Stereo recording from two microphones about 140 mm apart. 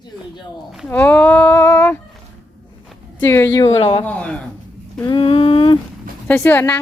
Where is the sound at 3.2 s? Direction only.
15° left (ahead or behind).